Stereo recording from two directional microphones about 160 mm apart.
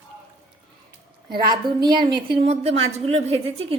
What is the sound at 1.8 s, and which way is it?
A woman's voice, 25° right (ahead or behind).